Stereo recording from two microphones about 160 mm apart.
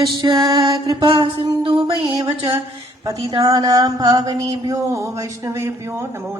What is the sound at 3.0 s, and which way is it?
Music, 20° right (ahead or behind).